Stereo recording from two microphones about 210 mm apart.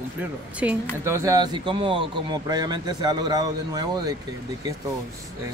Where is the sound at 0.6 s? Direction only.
5° right (ahead or behind).